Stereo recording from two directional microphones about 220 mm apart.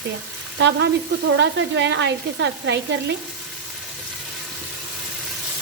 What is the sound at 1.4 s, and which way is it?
Frying, 50° right (ahead or behind).